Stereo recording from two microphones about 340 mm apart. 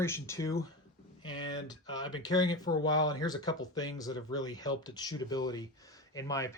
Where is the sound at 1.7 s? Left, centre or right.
Centre.